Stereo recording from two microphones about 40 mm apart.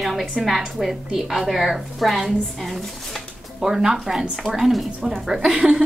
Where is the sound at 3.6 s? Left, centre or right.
Centre.